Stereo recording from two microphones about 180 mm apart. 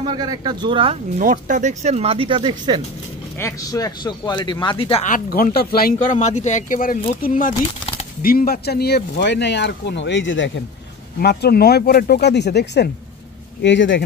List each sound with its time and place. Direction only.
0.0 s speech: 25° right (ahead or behind)
1.2 s speech: 45° right (ahead or behind); by 2.8 s 25° right (ahead or behind)
3.3 s speech: 15° left (ahead or behind)
5.0 s speech: 50° left (ahead or behind)
6.0 s speech: 40° left (ahead or behind)
7.5 s a sound: 30° left (ahead or behind)
8.2 s speech: 55° left (ahead or behind); by 10.5 s 90° left
11.1 s speech: 60° left (ahead or behind)
13.6 s speech: 90° left